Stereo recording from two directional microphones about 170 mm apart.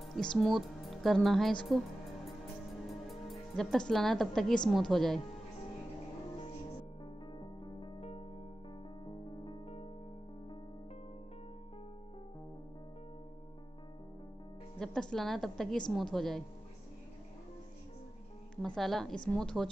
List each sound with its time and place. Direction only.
0.0 s a woman's voice: 5° left (ahead or behind)
3.1 s a woman's voice: centre (ahead or behind)
7.3 s music: 25° left (ahead or behind)
14.8 s a woman's voice: 5° left (ahead or behind)
18.8 s a woman's voice: centre (ahead or behind)